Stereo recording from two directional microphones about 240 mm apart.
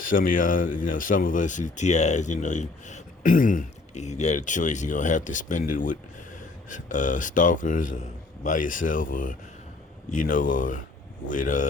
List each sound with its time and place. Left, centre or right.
0.0 s speech: left